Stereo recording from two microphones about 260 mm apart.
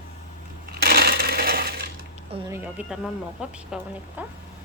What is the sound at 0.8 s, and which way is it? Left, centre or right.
Coin, right.